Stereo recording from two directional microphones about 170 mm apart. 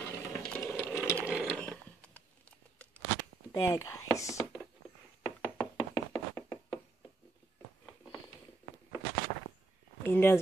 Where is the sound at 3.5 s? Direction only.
20° left (ahead or behind).